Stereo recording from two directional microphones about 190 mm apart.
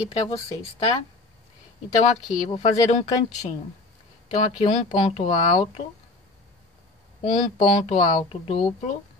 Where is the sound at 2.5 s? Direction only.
30° left (ahead or behind).